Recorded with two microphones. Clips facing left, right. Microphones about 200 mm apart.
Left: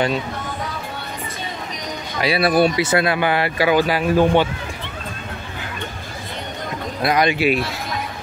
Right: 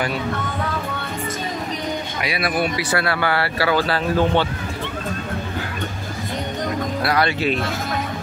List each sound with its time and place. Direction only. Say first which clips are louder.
2.2 s speech: left 7 dB; 30° left (ahead or behind); by 4.5 s 15° left (ahead or behind)
7.0 s speech: left 4 dB; 20° left (ahead or behind)